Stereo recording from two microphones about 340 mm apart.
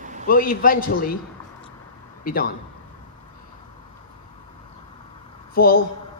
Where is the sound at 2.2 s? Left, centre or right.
Left.